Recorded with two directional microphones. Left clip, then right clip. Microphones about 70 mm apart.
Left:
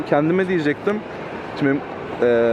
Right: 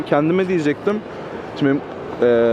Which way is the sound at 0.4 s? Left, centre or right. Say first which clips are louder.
Right 1 dB; right.